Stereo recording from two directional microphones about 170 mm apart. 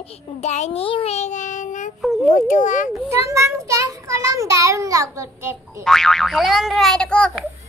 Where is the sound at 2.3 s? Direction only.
50° left (ahead or behind).